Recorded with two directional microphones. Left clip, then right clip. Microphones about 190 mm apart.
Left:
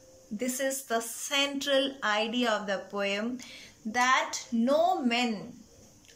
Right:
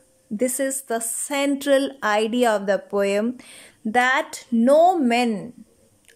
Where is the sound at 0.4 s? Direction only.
35° right (ahead or behind).